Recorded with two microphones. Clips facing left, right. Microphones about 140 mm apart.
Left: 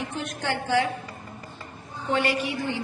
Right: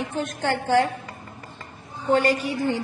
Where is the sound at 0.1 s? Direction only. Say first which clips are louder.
Right 4 dB; 45° right (ahead or behind).